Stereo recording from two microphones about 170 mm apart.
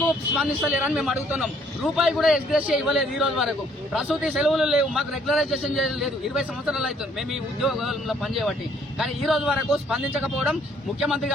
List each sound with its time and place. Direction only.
0.3 s a man's voice: 5° right (ahead or behind)